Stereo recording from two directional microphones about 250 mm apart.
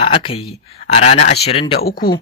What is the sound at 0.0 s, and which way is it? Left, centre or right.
Speech, left.